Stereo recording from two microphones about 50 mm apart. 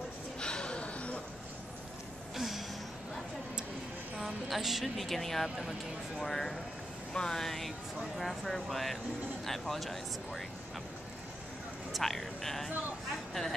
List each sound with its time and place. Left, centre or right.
0.4 s a sound: centre
2.3 s music: centre
4.2 s speech: centre
11.9 s speech: centre